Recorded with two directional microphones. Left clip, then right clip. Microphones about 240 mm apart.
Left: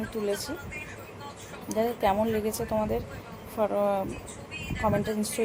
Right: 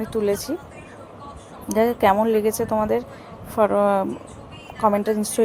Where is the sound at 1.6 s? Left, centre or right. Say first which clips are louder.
Right 8 dB; right.